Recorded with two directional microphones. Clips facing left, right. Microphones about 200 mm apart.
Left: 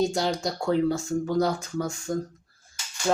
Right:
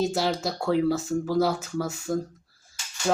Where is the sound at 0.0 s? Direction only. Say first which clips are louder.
Even; 5° right (ahead or behind).